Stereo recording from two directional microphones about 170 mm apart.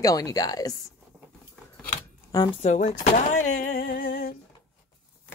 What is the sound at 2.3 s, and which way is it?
Speech, 20° left (ahead or behind).